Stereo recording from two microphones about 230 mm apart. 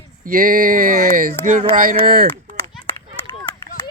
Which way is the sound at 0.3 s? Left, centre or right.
Right.